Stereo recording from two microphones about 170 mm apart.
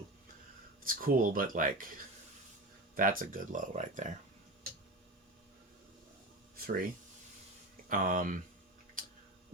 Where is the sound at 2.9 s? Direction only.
55° right (ahead or behind).